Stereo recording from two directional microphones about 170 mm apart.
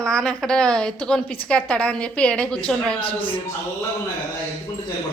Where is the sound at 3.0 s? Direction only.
30° left (ahead or behind).